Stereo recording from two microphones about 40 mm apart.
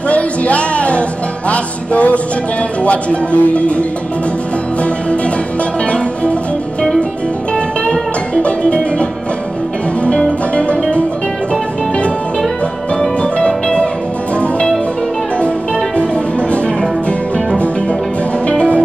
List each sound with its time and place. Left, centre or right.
0.1 s music: left
1.5 s speech: left
7.8 s music: left
10.0 s music: left
13.2 s music: left